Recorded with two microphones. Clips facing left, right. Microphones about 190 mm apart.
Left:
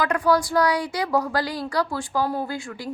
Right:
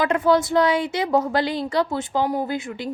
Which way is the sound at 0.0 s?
25° right (ahead or behind).